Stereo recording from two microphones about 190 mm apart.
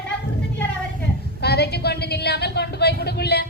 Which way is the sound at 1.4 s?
60° left (ahead or behind).